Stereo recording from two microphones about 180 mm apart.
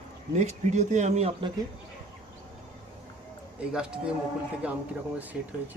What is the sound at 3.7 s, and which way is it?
Speech, 5° right (ahead or behind).